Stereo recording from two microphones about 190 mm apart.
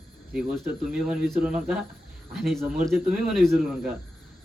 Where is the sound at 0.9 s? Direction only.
Centre (ahead or behind).